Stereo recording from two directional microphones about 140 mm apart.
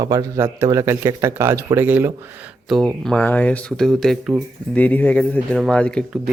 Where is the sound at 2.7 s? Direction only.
5° left (ahead or behind).